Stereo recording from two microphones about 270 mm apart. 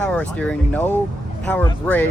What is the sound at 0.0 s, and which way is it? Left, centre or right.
Speech, centre.